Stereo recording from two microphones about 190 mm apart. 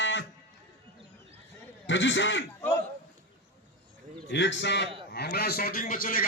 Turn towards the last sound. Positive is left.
turn(degrees=50)  # may be behind; listen again after turning